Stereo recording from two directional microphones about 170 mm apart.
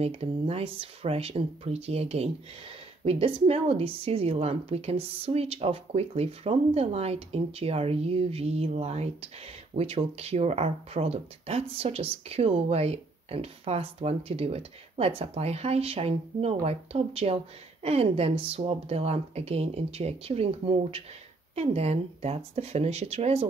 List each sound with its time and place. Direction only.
0.0 s speech: 35° right (ahead or behind)